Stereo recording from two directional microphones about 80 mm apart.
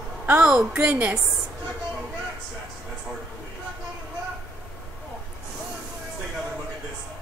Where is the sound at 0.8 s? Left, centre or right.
Centre.